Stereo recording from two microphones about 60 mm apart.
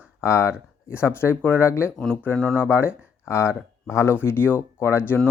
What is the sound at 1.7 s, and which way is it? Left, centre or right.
Speech, left.